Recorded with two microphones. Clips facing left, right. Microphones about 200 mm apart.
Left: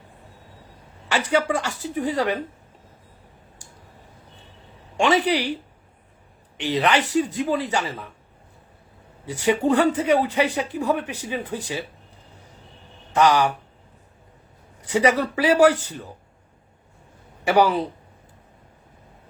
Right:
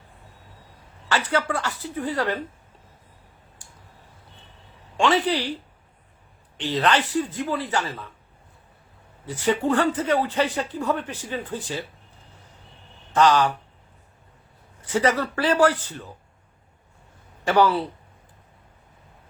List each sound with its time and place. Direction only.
1.3 s speech: 15° left (ahead or behind)
4.9 s speech: 15° left (ahead or behind)
6.6 s speech: 15° left (ahead or behind)
9.2 s speech: 15° left (ahead or behind)
13.1 s speech: 10° left (ahead or behind)
14.8 s speech: 15° left (ahead or behind)
17.4 s speech: 15° left (ahead or behind)